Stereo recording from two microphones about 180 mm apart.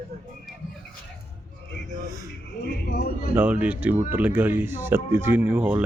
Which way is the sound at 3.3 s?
10° right (ahead or behind).